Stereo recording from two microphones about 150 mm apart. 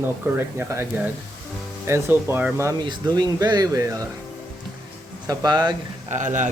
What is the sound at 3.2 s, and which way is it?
Speech, 25° right (ahead or behind).